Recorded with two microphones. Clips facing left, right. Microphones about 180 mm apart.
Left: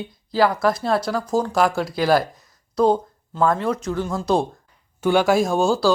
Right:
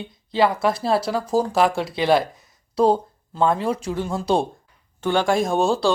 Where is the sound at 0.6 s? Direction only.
30° right (ahead or behind).